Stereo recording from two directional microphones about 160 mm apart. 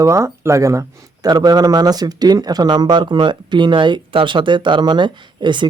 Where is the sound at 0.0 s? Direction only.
20° right (ahead or behind).